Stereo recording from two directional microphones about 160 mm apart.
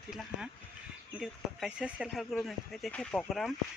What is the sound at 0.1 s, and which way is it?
Speech, 5° right (ahead or behind).